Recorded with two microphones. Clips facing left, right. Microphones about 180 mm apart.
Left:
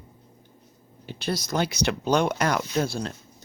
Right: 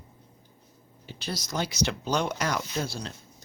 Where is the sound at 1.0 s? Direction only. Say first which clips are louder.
Left 7 dB; 60° left (ahead or behind).